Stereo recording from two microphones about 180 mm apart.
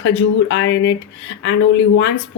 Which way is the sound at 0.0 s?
90° left.